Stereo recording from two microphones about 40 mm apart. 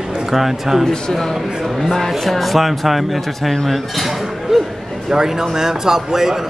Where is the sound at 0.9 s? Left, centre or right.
Centre.